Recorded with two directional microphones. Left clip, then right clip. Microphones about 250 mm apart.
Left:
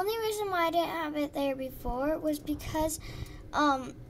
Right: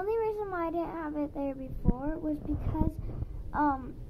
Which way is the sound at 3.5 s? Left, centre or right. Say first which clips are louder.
Left 2 dB; left.